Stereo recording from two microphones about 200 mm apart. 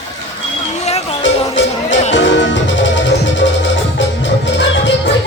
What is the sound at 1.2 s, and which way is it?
Music, 65° left (ahead or behind).